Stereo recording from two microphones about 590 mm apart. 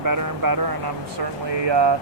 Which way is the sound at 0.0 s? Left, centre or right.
Right.